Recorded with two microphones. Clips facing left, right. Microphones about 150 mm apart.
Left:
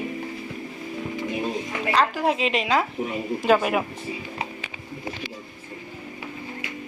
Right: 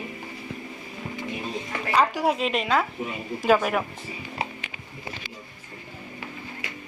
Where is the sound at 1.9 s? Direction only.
5° right (ahead or behind).